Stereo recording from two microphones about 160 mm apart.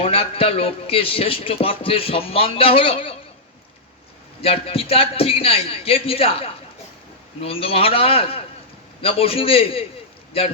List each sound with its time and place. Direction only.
0.0 s a man's voice: 35° left (ahead or behind)
4.4 s a man's voice: 35° left (ahead or behind)